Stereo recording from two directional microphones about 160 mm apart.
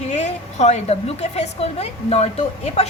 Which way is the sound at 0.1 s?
45° left (ahead or behind).